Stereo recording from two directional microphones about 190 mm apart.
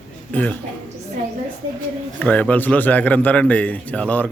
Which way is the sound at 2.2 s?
10° left (ahead or behind).